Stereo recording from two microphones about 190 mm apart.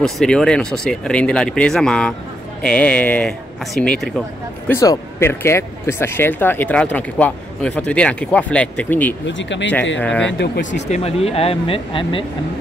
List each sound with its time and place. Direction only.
0.0 s speech: 5° left (ahead or behind)
4.6 s speech: 15° left (ahead or behind)
9.3 s speech: 70° left (ahead or behind)
9.9 s speech: 5° left (ahead or behind)
10.2 s speech: 70° left (ahead or behind)
10.9 s speech: 30° left (ahead or behind)